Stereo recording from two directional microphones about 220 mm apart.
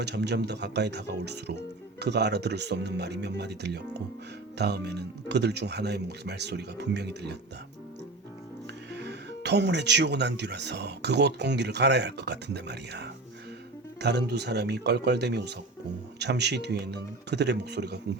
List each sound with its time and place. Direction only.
0.0 s speech: 50° right (ahead or behind)
8.9 s speech: 50° right (ahead or behind)